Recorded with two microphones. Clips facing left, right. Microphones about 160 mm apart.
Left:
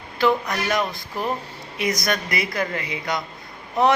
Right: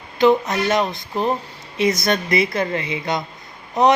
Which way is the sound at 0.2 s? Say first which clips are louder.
Right 5 dB; 20° right (ahead or behind).